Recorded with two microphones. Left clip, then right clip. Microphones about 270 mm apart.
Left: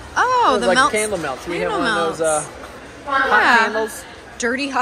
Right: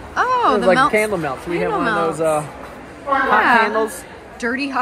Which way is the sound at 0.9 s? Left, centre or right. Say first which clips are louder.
Right 3 dB; right.